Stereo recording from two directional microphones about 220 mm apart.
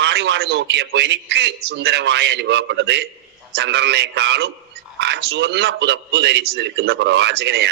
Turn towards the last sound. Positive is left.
turn(degrees=-50)  # may be behind; listen again after turning